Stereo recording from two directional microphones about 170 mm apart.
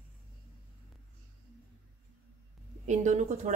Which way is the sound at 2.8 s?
45° right (ahead or behind).